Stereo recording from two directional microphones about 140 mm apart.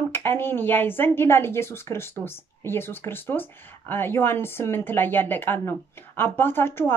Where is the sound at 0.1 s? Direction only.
15° left (ahead or behind).